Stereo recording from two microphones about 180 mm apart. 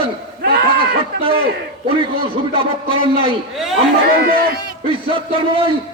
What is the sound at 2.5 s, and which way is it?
Speech, 30° right (ahead or behind).